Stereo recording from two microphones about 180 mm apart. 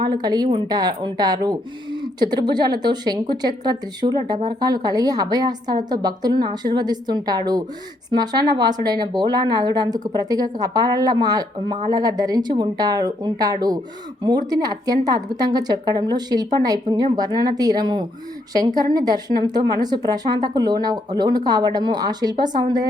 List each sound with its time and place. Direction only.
0.0 s a woman's voice: 25° right (ahead or behind)